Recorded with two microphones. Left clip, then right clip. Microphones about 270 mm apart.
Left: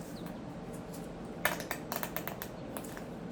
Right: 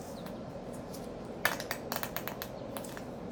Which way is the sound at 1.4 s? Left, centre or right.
Centre.